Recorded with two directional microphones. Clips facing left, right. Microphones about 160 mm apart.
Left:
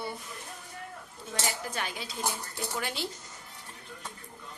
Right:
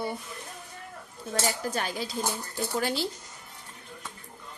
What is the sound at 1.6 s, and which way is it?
Speech, 40° right (ahead or behind).